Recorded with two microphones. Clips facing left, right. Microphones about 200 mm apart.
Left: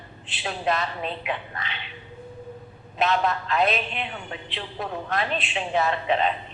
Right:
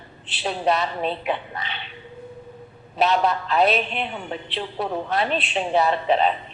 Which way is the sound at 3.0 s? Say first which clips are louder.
Right 3 dB; 35° right (ahead or behind).